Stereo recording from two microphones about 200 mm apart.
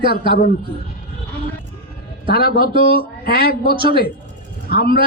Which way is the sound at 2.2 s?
50° left (ahead or behind).